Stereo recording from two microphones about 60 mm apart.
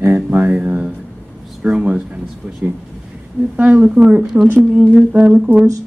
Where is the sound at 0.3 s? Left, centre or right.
Right.